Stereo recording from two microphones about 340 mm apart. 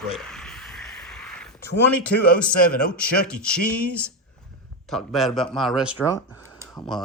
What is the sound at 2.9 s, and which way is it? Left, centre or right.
Speech, centre.